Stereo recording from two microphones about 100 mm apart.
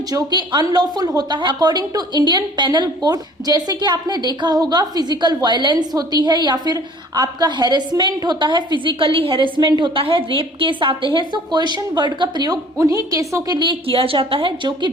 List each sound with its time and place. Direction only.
0.1 s a woman's voice: 40° right (ahead or behind); by 9.5 s 60° right (ahead or behind)
9.6 s a woman's voice: 45° right (ahead or behind)
13.6 s a woman's voice: 60° right (ahead or behind)